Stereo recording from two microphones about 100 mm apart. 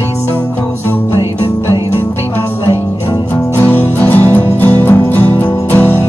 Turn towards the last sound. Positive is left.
turn(degrees=20)  # may be behind; listen again after turning